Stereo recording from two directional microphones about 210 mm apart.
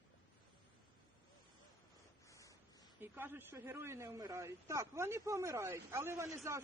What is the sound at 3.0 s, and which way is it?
A man's voice, 10° right (ahead or behind).